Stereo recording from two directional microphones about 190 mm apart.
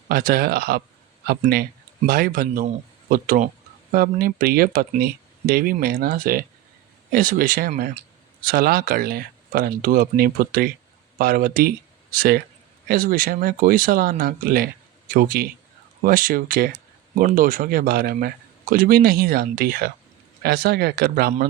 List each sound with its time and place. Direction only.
0.1 s speech: 50° right (ahead or behind)